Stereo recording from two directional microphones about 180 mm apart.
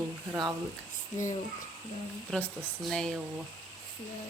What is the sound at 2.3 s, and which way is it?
Speech, centre (ahead or behind).